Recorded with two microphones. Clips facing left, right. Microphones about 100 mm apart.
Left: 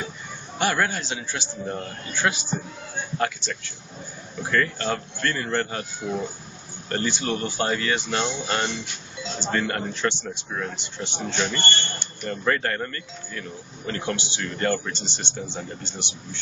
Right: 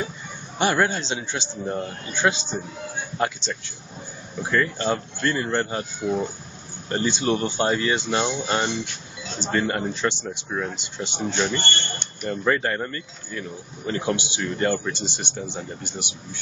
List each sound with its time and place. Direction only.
0.6 s speech: 20° right (ahead or behind)